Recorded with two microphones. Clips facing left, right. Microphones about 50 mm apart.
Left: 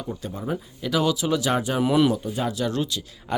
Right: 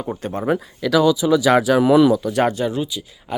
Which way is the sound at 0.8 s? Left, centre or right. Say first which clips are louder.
Right 8 dB; right.